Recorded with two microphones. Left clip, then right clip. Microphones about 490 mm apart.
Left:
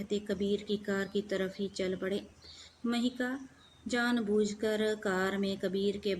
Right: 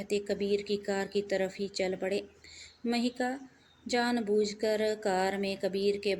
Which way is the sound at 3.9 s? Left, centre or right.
Left.